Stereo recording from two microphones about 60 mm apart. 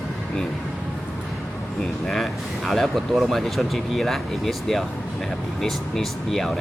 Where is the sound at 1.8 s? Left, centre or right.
Centre.